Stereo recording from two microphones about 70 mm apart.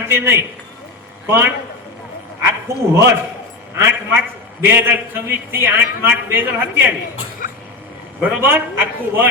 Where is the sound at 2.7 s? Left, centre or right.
Right.